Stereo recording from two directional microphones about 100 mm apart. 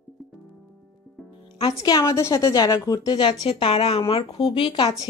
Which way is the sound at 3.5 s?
70° left (ahead or behind).